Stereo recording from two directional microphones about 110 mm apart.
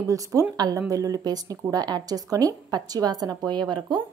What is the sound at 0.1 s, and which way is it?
A woman's voice, 30° right (ahead or behind).